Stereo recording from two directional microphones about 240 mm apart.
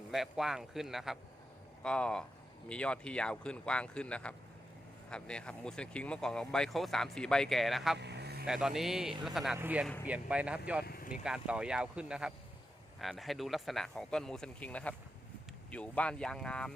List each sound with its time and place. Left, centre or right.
0.1 s speech: centre
7.9 s vehicle: right
8.4 s speech: centre
10.8 s speech: left
11.2 s speech: centre